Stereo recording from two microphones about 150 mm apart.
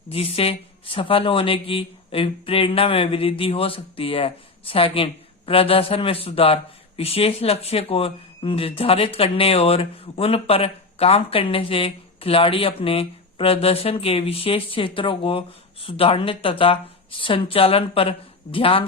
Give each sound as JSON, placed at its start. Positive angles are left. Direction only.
{"t": 0.1, "sound": "speech", "side_deg": 40}